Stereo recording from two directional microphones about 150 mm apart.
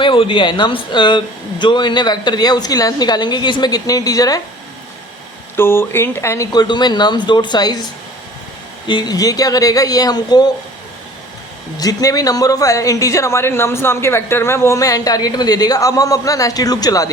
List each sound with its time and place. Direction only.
0.0 s speech: 35° left (ahead or behind)
5.5 s speech: 15° left (ahead or behind)
8.9 s speech: 30° left (ahead or behind)
11.8 s speech: 25° left (ahead or behind)